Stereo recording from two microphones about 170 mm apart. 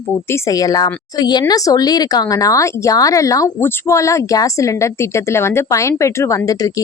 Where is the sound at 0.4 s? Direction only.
20° left (ahead or behind).